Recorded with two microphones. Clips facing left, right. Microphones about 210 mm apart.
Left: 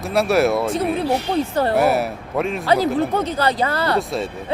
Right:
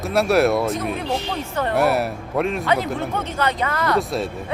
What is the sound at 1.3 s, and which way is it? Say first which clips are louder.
Speech: left 5 dB; 35° left (ahead or behind).